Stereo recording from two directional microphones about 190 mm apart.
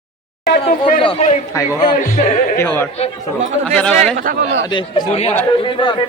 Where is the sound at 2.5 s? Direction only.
10° left (ahead or behind).